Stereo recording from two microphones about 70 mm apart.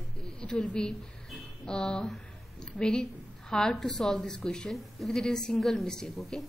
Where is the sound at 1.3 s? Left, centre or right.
Centre.